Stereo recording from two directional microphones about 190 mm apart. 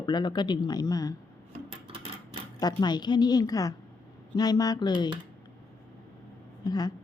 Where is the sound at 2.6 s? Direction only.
20° left (ahead or behind).